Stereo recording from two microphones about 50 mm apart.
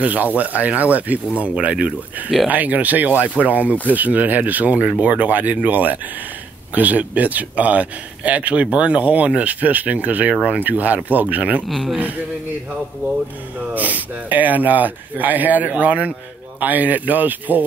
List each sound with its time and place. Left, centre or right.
0.0 s speech: right
11.6 s speech: centre
13.7 s speech: right